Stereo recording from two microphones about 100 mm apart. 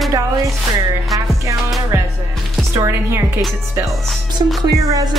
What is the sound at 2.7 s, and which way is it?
Speech, 25° right (ahead or behind).